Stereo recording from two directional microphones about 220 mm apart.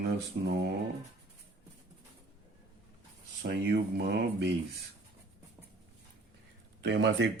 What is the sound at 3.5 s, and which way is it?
Speech, 50° right (ahead or behind).